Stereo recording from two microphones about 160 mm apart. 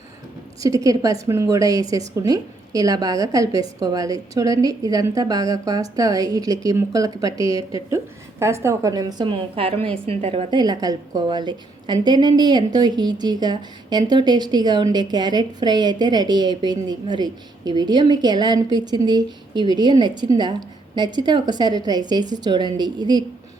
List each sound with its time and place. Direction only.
0.6 s a woman's voice: 20° right (ahead or behind); by 10.4 s 40° right (ahead or behind)
10.5 s a woman's voice: 25° right (ahead or behind)